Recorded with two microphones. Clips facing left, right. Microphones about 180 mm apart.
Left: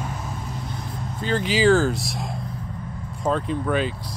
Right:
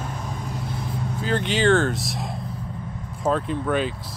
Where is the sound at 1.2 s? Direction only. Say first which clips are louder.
Left 2 dB; centre (ahead or behind).